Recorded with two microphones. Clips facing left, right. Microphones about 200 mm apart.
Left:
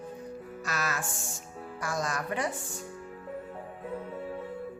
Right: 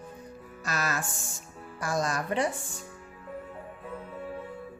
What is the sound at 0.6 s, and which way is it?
A woman's voice, 35° right (ahead or behind).